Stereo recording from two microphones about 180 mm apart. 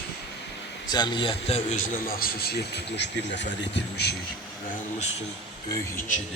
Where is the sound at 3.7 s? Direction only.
65° left (ahead or behind).